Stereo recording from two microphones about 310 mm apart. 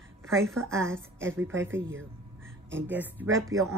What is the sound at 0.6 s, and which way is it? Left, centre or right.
Speech, centre.